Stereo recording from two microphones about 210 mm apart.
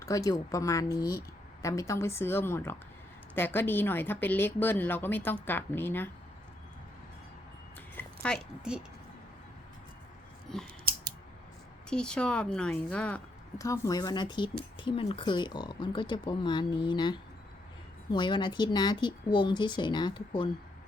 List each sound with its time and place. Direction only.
0.0 s speech: 15° left (ahead or behind)
7.9 s a woman's voice: 5° left (ahead or behind)
10.5 s a woman's voice: centre (ahead or behind)
11.9 s a woman's voice: 5° left (ahead or behind)
13.6 s speech: 15° left (ahead or behind)